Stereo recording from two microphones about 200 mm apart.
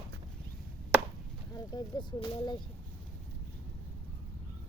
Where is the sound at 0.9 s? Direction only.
5° right (ahead or behind).